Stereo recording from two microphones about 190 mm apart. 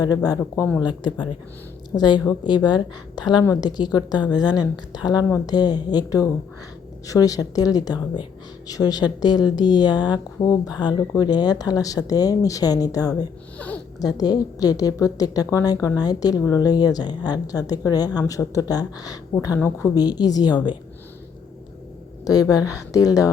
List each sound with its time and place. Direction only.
0.0 s speech: 20° left (ahead or behind)
13.6 s speech: 10° left (ahead or behind)
14.0 s speech: 20° left (ahead or behind)
22.2 s speech: 20° left (ahead or behind)